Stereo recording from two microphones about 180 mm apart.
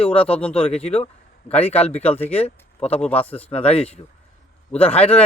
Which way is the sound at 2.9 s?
10° left (ahead or behind).